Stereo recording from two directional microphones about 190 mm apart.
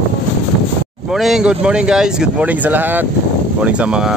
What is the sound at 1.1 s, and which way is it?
Speech, centre (ahead or behind).